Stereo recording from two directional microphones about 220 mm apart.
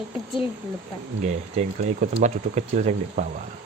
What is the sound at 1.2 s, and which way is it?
Speech, 30° right (ahead or behind).